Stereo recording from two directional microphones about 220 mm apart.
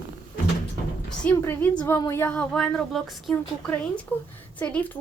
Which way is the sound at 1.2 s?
10° left (ahead or behind).